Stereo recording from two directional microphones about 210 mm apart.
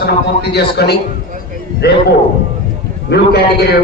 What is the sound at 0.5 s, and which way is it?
Speech, 50° left (ahead or behind).